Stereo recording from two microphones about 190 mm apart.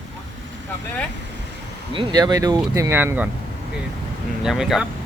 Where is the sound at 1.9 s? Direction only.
25° right (ahead or behind).